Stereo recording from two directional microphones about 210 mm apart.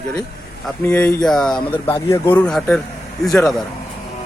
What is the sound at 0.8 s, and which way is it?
Speech, 10° left (ahead or behind).